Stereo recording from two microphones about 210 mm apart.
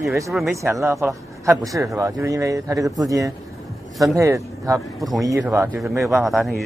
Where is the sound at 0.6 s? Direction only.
15° right (ahead or behind).